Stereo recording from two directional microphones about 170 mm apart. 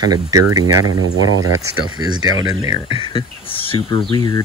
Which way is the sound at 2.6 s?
30° left (ahead or behind).